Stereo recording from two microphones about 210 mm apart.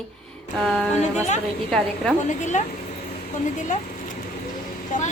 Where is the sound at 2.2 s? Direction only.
35° left (ahead or behind).